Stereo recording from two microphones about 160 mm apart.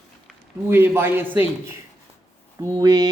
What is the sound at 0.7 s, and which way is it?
Speech, 15° right (ahead or behind).